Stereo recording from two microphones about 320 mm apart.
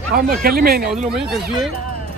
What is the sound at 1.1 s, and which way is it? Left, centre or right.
Speech, centre.